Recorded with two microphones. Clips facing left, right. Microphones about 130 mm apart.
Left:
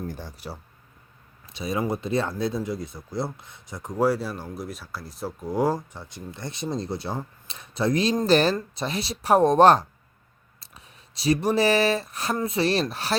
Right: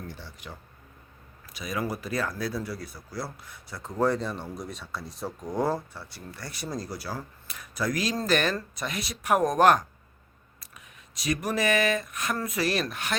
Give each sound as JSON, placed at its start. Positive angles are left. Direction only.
{"t": 0.1, "sound": "speech", "side_deg": 45}